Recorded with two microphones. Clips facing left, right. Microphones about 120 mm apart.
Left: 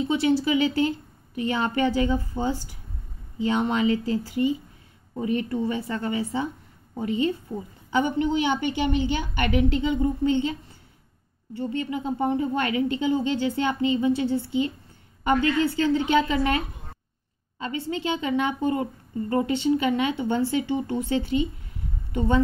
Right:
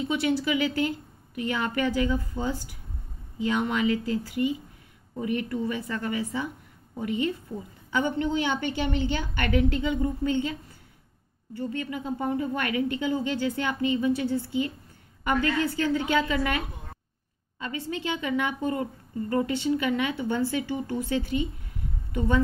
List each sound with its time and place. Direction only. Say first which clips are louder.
0.0 s a woman's voice: left 4 dB; 30° left (ahead or behind)
7.9 s a woman's voice: left 3 dB; 15° left (ahead or behind)